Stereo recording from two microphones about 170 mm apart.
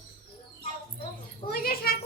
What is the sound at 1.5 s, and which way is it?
Speech, 65° left (ahead or behind).